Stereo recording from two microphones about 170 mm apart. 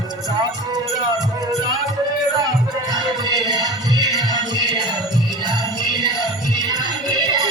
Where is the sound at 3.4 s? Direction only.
25° right (ahead or behind).